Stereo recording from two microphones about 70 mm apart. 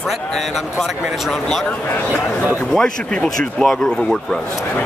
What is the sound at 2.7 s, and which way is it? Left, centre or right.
Speech, centre.